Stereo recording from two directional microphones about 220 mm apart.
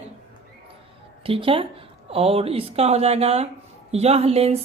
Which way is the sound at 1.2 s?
25° right (ahead or behind).